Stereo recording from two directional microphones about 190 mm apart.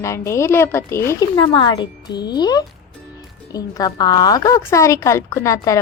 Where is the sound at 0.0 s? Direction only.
15° left (ahead or behind).